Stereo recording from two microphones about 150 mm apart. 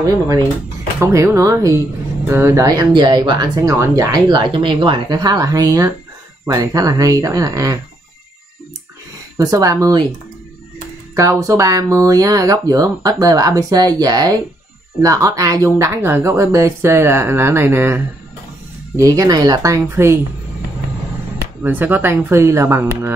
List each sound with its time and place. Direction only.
0.0 s speech: 20° right (ahead or behind)
9.4 s speech: 25° right (ahead or behind)
11.1 s speech: 20° right (ahead or behind)
21.6 s speech: 10° right (ahead or behind)